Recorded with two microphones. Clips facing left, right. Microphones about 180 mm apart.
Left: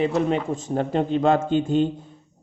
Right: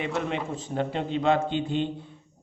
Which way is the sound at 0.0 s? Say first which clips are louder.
Left 7 dB; 35° left (ahead or behind).